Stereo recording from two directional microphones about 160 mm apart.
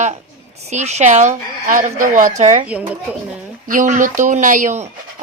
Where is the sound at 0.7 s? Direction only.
45° right (ahead or behind).